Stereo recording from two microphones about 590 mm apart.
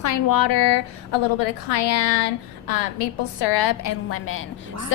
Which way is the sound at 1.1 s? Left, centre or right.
Left.